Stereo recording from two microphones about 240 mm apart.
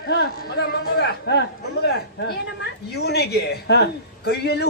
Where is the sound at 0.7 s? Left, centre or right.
Left.